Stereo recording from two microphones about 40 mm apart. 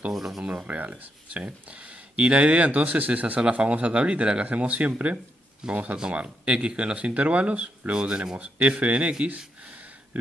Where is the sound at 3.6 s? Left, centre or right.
Right.